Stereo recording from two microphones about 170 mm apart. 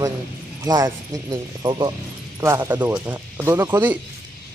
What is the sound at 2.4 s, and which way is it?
Speech, 15° right (ahead or behind).